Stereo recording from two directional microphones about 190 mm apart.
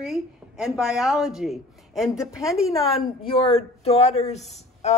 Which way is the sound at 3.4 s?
30° left (ahead or behind).